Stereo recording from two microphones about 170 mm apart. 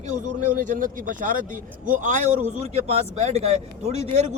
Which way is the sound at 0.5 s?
55° right (ahead or behind).